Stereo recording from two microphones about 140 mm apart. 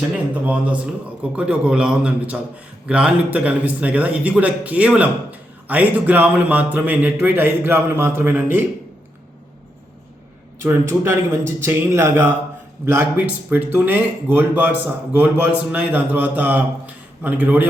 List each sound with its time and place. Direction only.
0.1 s speech: 10° right (ahead or behind)
10.6 s speech: 15° right (ahead or behind)